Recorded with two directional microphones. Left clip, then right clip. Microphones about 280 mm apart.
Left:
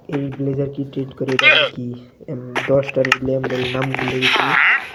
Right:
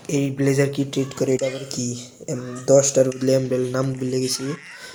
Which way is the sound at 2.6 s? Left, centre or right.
Centre.